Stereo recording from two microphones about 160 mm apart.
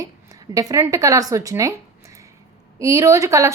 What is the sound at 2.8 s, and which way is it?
Speech, 20° right (ahead or behind).